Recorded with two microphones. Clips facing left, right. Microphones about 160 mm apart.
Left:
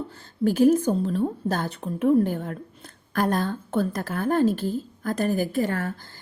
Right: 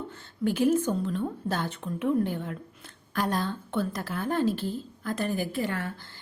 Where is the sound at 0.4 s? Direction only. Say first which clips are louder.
Left 5 dB; 40° left (ahead or behind).